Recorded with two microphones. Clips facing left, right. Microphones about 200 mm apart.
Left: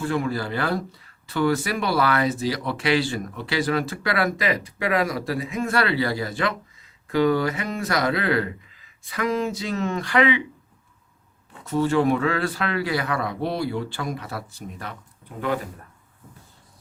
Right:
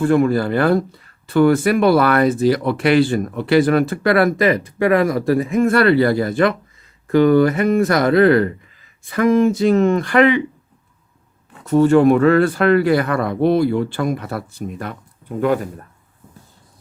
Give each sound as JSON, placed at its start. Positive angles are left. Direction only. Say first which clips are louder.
{"t": 0.0, "sound": "speech", "louder": "right 10 dB", "side_deg": -55}
{"t": 11.6, "sound": "speech", "louder": "right 9 dB", "side_deg": -50}